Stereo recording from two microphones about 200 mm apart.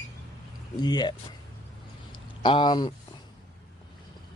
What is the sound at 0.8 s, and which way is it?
Speech, 20° left (ahead or behind).